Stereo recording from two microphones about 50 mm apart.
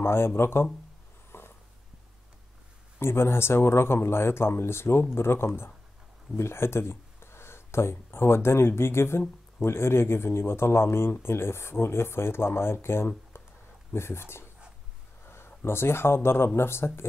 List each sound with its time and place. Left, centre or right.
0.0 s speech: left
1.3 s a sound: left
3.0 s speech: left